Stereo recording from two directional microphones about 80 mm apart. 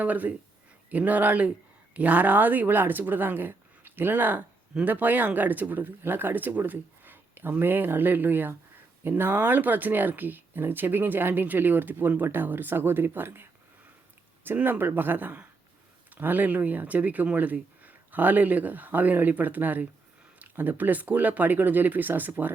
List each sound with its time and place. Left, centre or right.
0.0 s speech: centre
4.7 s speech: centre